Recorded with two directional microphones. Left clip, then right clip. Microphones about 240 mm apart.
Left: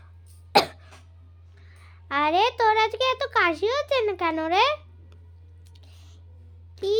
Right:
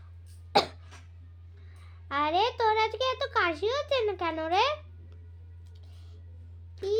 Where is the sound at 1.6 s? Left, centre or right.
Left.